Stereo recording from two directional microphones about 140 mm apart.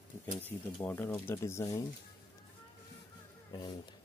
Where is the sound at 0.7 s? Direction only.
10° left (ahead or behind).